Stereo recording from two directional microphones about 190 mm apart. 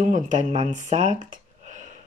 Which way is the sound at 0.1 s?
40° right (ahead or behind).